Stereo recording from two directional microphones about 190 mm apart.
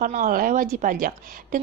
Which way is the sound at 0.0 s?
45° right (ahead or behind).